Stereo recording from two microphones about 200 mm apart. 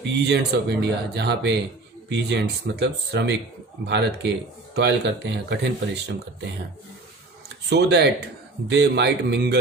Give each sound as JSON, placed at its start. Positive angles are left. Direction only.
{"t": 0.2, "sound": "speech", "side_deg": -55}
{"t": 7.7, "sound": "speech", "side_deg": -55}